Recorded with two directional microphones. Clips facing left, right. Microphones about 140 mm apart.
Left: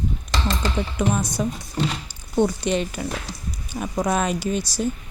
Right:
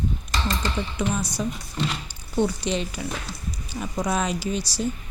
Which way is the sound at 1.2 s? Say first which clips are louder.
Left 3 dB; 50° left (ahead or behind).